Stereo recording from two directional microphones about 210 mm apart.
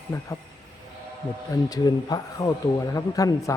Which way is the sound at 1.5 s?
20° left (ahead or behind).